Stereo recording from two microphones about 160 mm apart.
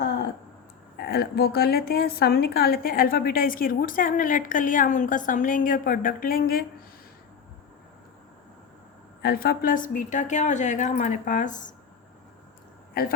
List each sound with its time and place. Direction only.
0.9 s a woman's voice: 75° left (ahead or behind)
9.2 s a woman's voice: 75° left (ahead or behind); by 11.7 s 50° left (ahead or behind)
12.9 s speech: 65° left (ahead or behind)